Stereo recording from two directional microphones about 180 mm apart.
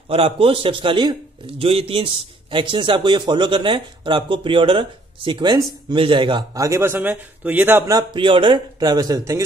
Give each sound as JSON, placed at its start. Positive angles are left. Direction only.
{"t": 0.1, "sound": "speech", "side_deg": -30}